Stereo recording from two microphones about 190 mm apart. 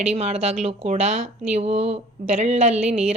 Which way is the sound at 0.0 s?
35° right (ahead or behind).